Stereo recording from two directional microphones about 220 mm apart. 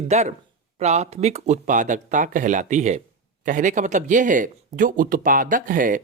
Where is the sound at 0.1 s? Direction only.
30° right (ahead or behind).